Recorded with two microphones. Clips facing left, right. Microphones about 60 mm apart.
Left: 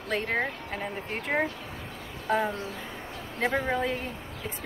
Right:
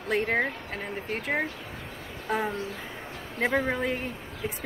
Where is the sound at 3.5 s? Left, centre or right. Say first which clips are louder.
Right 1 dB; centre.